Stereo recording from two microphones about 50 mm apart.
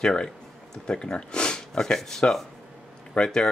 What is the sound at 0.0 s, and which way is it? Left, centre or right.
Speech, centre.